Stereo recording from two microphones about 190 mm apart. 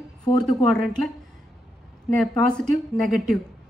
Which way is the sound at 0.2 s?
20° left (ahead or behind).